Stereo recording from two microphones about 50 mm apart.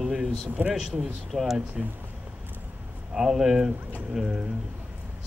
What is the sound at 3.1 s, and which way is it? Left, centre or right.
Speech, centre.